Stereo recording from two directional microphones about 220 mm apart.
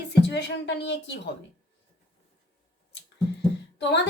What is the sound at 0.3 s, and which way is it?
Speech, 50° left (ahead or behind).